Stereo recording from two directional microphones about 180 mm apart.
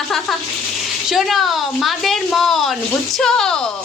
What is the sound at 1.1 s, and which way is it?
A woman's voice, centre (ahead or behind).